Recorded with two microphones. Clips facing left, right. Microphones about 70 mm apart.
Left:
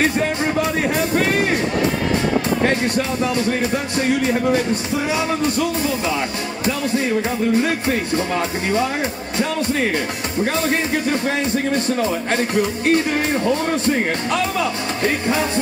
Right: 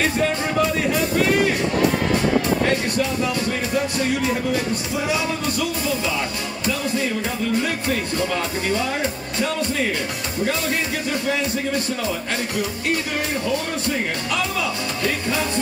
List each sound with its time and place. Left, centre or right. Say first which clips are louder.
6.6 s music: left 3 dB; left
10.4 s speech: left 3 dB; left
13.5 s speech: left 5 dB; left
15.0 s music: left 4 dB; left